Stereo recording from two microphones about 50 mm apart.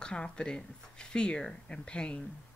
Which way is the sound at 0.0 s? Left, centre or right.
Centre.